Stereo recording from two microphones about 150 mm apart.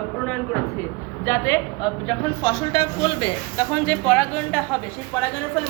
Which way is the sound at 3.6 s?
10° left (ahead or behind).